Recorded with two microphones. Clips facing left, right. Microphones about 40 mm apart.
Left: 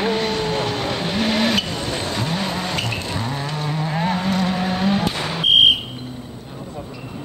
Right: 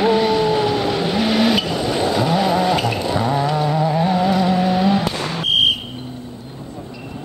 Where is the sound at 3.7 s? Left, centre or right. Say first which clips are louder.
Right 5 dB; centre.